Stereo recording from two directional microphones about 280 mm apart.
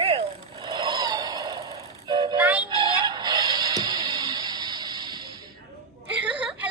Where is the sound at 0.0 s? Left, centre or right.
Centre.